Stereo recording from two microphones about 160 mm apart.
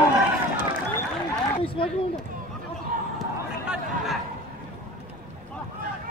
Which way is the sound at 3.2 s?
5° right (ahead or behind).